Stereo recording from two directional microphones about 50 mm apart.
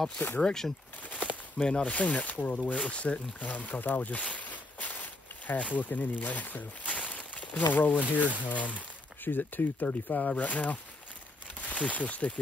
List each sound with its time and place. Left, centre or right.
0.4 s speech: centre
1.0 s a sound: left
1.7 s speech: left
2.7 s speech: left